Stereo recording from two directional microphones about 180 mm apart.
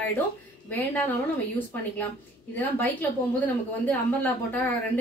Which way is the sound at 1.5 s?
10° left (ahead or behind).